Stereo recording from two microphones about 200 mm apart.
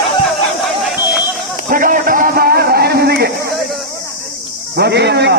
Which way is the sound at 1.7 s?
45° right (ahead or behind).